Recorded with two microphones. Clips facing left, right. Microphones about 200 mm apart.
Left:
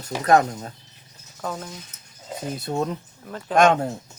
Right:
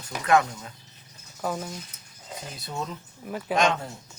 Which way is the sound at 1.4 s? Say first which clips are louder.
Right 1 dB; 5° right (ahead or behind).